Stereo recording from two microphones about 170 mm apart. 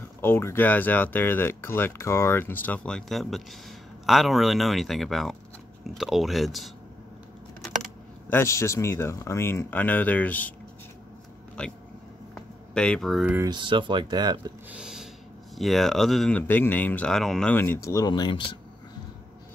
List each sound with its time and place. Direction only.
0.2 s speech: 15° left (ahead or behind)
7.6 s typing: 5° left (ahead or behind)
8.4 s speech: 15° left (ahead or behind)
11.6 s speech: 5° left (ahead or behind)
12.4 s a sound: 5° left (ahead or behind)
13.4 s speech: 25° right (ahead or behind)
14.7 s a sound: 5° right (ahead or behind)
15.5 s speech: centre (ahead or behind)
17.8 s speech: 20° left (ahead or behind)